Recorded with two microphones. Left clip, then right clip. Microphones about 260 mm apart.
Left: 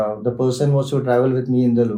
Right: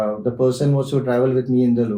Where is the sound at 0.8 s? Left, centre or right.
Left.